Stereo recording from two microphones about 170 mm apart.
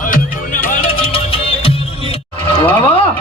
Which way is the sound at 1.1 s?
35° left (ahead or behind).